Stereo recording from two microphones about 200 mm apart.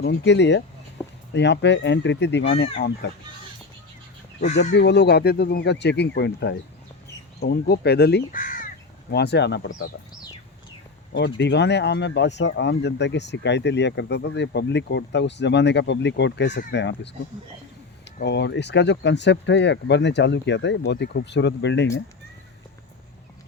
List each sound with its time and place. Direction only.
0.0 s speech: 60° left (ahead or behind)
4.7 s speech: 60° left (ahead or behind); by 8.5 s 40° left (ahead or behind)
9.1 s speech: 55° left (ahead or behind)
11.1 s speech: 60° left (ahead or behind)
18.2 s speech: 60° left (ahead or behind)